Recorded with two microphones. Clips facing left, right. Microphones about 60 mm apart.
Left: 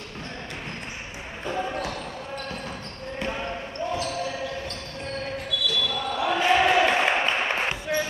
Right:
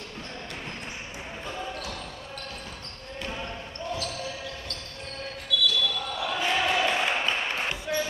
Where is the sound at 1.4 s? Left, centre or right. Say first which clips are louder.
Left 8 dB; left.